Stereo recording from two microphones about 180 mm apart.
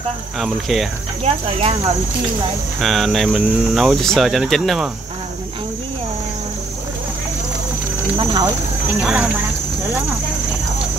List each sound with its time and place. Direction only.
0.4 s speech: centre (ahead or behind)
1.2 s speech: 35° right (ahead or behind)
2.8 s speech: centre (ahead or behind)
9.0 s speech: 5° right (ahead or behind)